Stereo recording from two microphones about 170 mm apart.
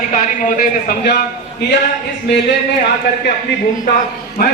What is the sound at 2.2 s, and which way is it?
Speech, 85° left.